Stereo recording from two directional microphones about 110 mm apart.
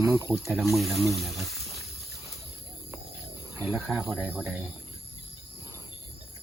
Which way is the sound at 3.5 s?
25° right (ahead or behind).